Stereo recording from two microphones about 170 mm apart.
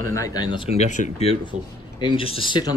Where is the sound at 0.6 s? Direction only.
40° left (ahead or behind).